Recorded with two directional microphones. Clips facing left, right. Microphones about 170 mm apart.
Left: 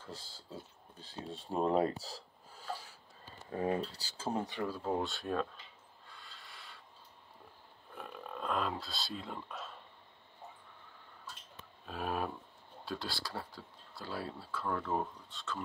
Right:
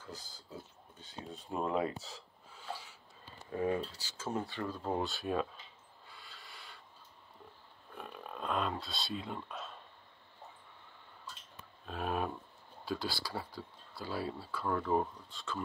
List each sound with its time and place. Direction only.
0.0 s speech: 30° left (ahead or behind)
0.9 s a sound: 35° left (ahead or behind)
4.0 s speech: 30° left (ahead or behind)
4.5 s speech: 10° left (ahead or behind); by 5.5 s 5° right (ahead or behind)
6.0 s a sound: centre (ahead or behind)
8.0 s speech: centre (ahead or behind)
11.8 s speech: centre (ahead or behind)